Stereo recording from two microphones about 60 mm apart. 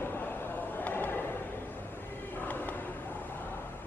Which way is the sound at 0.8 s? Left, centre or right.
Left.